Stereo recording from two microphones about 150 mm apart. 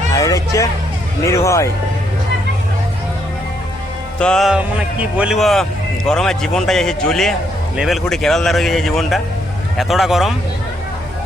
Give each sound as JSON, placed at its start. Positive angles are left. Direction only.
{"t": 0.1, "sound": "hubbub", "side_deg": 20}
{"t": 1.2, "sound": "speech", "side_deg": 20}
{"t": 4.2, "sound": "speech", "side_deg": 5}